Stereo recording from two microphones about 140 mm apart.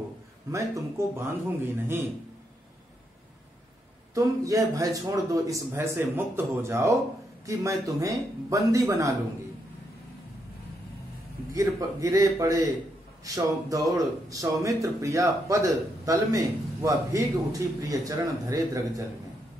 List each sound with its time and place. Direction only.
0.5 s speech: 20° right (ahead or behind)
4.1 s speech: 25° right (ahead or behind)
11.5 s speech: 25° right (ahead or behind)